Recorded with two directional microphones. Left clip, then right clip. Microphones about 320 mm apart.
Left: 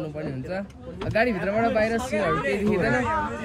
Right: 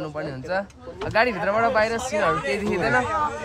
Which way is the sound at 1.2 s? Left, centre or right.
Right.